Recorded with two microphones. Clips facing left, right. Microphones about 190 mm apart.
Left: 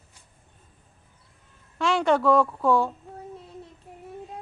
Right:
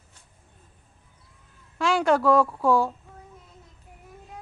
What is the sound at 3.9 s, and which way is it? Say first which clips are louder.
Child singing: left 7 dB; 30° left (ahead or behind).